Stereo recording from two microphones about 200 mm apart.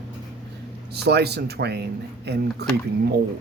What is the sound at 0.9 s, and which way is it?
Speech, 55° right (ahead or behind).